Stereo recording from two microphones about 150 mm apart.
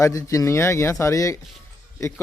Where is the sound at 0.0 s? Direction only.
20° left (ahead or behind).